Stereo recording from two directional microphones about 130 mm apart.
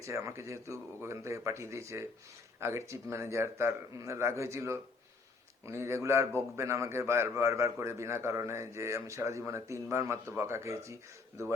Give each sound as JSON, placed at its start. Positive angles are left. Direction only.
{"t": 0.0, "sound": "a man's voice", "side_deg": -25}